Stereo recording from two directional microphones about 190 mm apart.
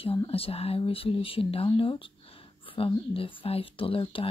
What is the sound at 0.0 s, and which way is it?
Speech, 30° left (ahead or behind).